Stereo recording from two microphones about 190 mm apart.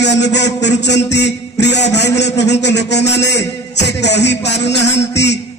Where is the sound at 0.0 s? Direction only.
65° left (ahead or behind).